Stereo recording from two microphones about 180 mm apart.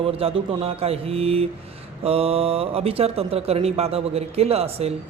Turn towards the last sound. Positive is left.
turn(degrees=-35)  # may be behind; listen again after turning